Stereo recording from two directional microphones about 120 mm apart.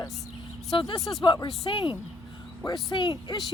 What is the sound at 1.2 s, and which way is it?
Speech, 40° left (ahead or behind).